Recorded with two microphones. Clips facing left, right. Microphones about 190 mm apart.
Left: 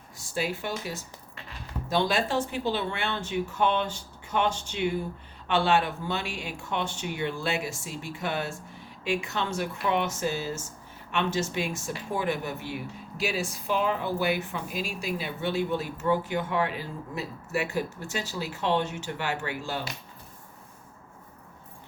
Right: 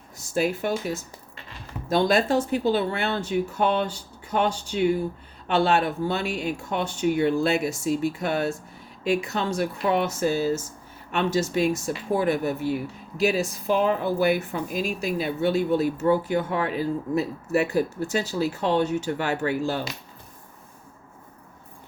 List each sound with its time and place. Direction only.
0.3 s speech: 50° right (ahead or behind)
2.0 s speech: 40° right (ahead or behind)